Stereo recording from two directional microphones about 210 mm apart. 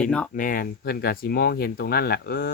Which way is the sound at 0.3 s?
40° left (ahead or behind).